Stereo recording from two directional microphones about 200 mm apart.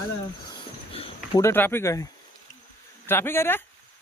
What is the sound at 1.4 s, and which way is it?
Speech, 10° left (ahead or behind).